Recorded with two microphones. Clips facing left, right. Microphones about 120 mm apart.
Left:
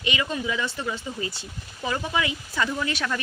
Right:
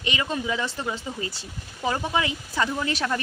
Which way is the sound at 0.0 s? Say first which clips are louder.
Even; 35° right (ahead or behind).